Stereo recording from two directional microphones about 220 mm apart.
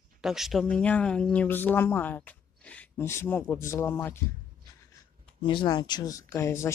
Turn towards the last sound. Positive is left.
turn(degrees=10)  # may be behind; listen again after turning